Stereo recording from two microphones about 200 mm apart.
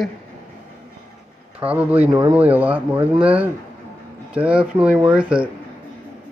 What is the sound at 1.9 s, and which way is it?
Speech, 20° right (ahead or behind).